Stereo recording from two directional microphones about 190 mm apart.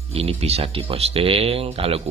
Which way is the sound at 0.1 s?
30° right (ahead or behind).